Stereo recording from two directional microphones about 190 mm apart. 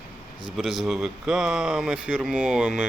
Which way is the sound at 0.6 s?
Centre (ahead or behind).